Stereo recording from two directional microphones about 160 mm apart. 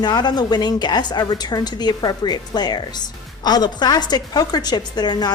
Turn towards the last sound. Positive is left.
turn(degrees=25)  # may be behind; listen again after turning